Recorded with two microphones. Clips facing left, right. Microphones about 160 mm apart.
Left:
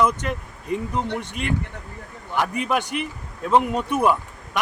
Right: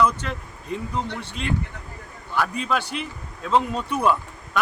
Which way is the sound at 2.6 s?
15° left (ahead or behind).